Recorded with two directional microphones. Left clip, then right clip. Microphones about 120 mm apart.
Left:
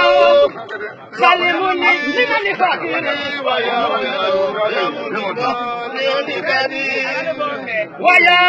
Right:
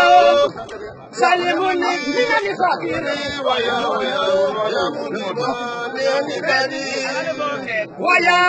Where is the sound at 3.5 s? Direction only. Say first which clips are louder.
Left 2 dB; 55° right (ahead or behind).